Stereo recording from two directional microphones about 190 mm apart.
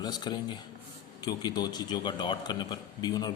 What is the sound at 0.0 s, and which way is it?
A man's voice, 20° left (ahead or behind).